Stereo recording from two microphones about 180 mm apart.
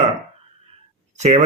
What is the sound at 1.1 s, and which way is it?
Speech, 40° right (ahead or behind).